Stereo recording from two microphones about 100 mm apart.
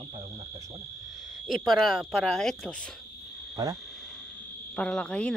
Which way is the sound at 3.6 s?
35° right (ahead or behind).